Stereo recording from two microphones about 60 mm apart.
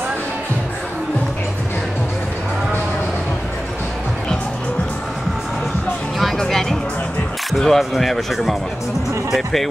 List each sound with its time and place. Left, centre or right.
6.1 s music: centre
7.5 s speech: centre